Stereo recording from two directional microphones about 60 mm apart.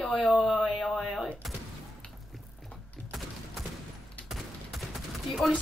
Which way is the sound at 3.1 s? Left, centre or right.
Centre.